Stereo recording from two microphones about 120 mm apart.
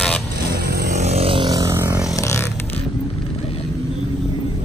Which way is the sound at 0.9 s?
65° right (ahead or behind).